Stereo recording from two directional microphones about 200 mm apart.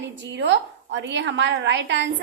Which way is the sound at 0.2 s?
60° right (ahead or behind).